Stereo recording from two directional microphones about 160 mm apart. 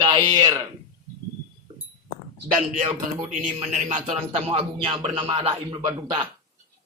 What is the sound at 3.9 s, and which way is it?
Speech, 50° right (ahead or behind).